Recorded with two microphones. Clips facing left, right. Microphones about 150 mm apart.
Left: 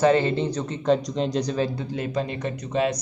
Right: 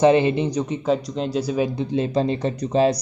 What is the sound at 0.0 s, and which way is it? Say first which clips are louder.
Speech: right 3 dB; 15° right (ahead or behind).